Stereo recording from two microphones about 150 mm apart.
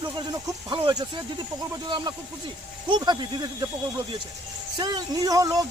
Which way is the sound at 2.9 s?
30° right (ahead or behind).